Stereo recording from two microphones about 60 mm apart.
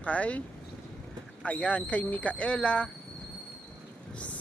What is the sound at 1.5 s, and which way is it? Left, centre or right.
Speech, left.